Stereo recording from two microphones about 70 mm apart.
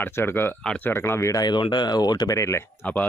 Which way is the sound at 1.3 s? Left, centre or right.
Left.